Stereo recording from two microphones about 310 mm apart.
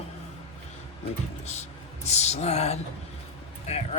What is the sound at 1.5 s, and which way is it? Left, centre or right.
Speech, left.